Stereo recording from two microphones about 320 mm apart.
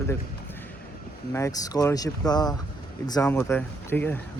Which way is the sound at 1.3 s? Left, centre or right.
Centre.